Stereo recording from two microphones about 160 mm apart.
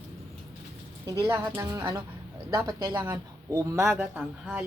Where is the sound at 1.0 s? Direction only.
20° right (ahead or behind).